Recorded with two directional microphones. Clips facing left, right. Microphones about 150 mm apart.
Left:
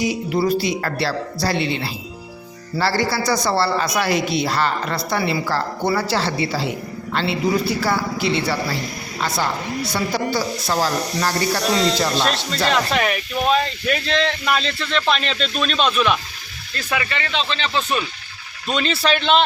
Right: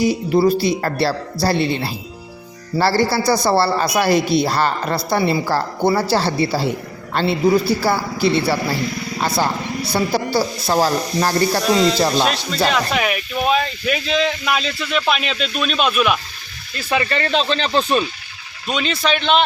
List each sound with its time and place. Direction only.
0.0 s speech: 35° right (ahead or behind)
12.1 s speech: centre (ahead or behind)
17.1 s speech: 40° right (ahead or behind)
18.7 s speech: centre (ahead or behind)